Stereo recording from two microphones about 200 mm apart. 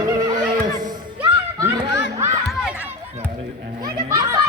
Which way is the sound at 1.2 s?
15° right (ahead or behind).